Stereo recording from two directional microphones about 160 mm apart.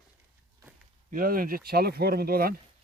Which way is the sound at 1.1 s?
60° right (ahead or behind).